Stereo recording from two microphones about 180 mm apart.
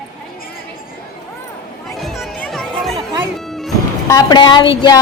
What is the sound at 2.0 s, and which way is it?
Music, centre (ahead or behind).